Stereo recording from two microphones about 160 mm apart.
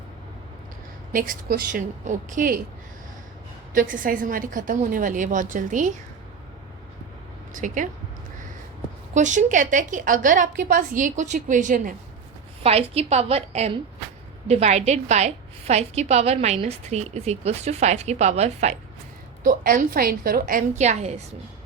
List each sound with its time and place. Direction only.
1.1 s a woman's voice: 65° right (ahead or behind)
3.8 s a woman's voice: 60° right (ahead or behind)
7.5 s a woman's voice: 55° right (ahead or behind)
9.1 s a woman's voice: 50° right (ahead or behind)
12.6 s a woman's voice: 40° right (ahead or behind)
19.5 s a woman's voice: 60° right (ahead or behind); by 21.2 s 45° right (ahead or behind)